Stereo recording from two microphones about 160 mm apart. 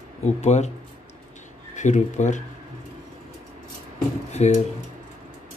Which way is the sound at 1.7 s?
50° left (ahead or behind).